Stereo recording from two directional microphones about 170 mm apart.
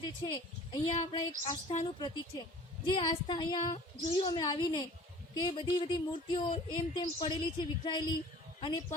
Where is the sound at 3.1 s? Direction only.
25° left (ahead or behind).